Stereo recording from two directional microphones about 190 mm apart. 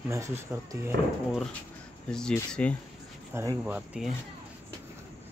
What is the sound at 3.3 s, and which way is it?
Speech, 15° right (ahead or behind).